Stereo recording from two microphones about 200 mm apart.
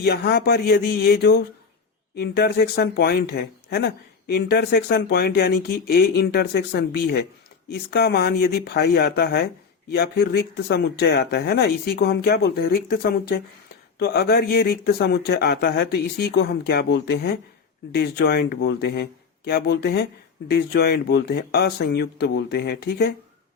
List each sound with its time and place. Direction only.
0.0 s speech: 50° left (ahead or behind)